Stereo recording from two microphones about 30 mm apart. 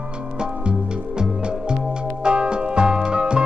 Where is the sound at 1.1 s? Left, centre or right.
Right.